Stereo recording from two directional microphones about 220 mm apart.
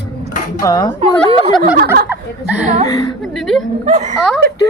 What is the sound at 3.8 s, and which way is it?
Speech, 35° right (ahead or behind).